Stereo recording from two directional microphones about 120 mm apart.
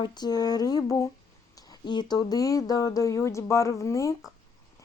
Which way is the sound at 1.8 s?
40° left (ahead or behind).